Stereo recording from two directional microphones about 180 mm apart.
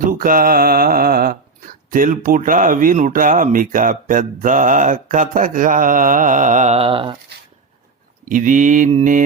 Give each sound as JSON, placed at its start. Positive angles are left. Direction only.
{"t": 0.0, "sound": "speech", "side_deg": -50}
{"t": 8.2, "sound": "speech", "side_deg": -50}